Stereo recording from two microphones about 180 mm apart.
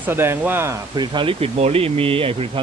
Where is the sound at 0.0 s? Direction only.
10° right (ahead or behind).